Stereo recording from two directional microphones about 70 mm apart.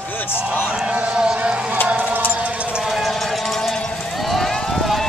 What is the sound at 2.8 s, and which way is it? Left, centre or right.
Run, centre.